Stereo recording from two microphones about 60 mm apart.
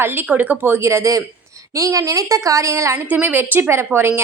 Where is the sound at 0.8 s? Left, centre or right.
Right.